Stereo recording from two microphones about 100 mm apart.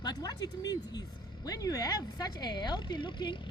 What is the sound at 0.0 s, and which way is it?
Speech, 40° left (ahead or behind).